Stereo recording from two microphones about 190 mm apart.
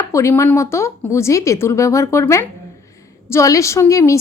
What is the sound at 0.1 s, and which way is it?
A woman's voice, 15° left (ahead or behind).